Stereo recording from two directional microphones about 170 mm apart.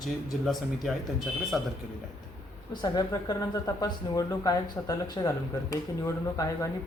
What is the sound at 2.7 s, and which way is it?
Speech, 25° left (ahead or behind).